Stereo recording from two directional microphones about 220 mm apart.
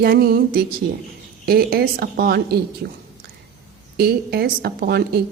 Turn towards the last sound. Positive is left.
turn(degrees=-45)  # may be behind; listen again after turning